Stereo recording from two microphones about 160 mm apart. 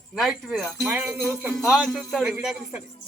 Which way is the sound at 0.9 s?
15° right (ahead or behind).